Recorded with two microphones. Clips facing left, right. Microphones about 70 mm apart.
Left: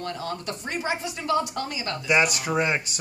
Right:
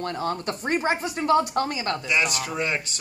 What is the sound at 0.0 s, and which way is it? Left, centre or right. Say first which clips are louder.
Speech: right 4 dB; right.